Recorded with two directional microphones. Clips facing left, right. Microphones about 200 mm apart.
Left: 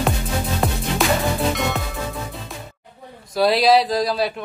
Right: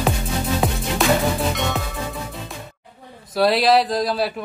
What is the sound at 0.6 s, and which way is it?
Music, centre (ahead or behind).